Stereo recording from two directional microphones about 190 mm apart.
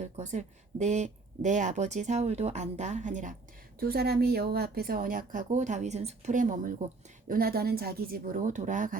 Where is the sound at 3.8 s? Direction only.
55° right (ahead or behind).